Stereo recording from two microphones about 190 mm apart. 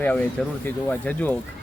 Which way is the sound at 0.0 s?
10° left (ahead or behind).